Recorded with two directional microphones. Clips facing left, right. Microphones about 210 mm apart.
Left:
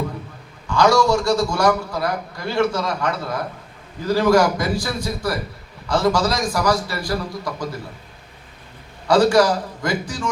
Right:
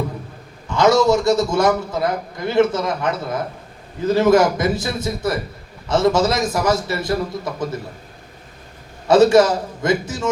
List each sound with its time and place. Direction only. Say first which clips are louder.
0.7 s a man's voice: right 2 dB; 20° right (ahead or behind)
9.0 s a man's voice: right 3 dB; 25° right (ahead or behind)